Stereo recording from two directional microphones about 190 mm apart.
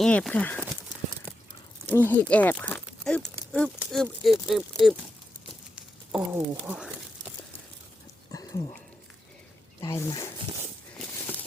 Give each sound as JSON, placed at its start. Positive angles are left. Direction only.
{"t": 0.0, "sound": "speech", "side_deg": 5}
{"t": 1.9, "sound": "speech", "side_deg": 10}
{"t": 5.7, "sound": "a sound", "side_deg": -5}
{"t": 8.3, "sound": "dog", "side_deg": 20}
{"t": 9.8, "sound": "speech", "side_deg": 15}
{"t": 10.9, "sound": "a sound", "side_deg": 10}